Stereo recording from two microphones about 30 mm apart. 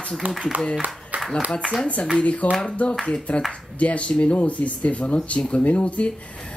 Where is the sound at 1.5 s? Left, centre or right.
Left.